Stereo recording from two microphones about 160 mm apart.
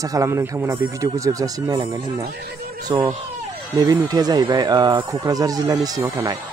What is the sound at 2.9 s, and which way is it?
Speech, 30° right (ahead or behind).